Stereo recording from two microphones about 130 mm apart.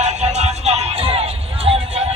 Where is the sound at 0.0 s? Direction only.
60° right (ahead or behind).